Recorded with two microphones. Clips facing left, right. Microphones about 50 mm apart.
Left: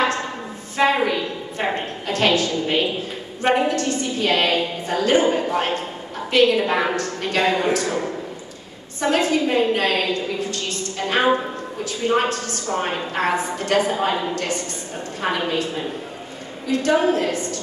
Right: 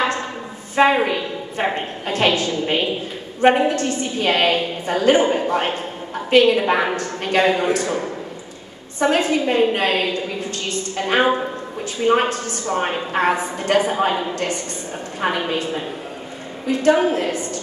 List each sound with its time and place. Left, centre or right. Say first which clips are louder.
1.0 s a woman's voice: even; right
5.2 s a man's voice: right 1 dB; centre
6.3 s a woman's voice: right 2 dB; right
7.4 s a man's voice: even; centre
7.7 s a woman's voice: right 1 dB; right
9.0 s a woman's voice: right 1 dB; right
12.7 s a man's voice: right 2 dB; centre
13.1 s a woman's voice: right 3 dB; right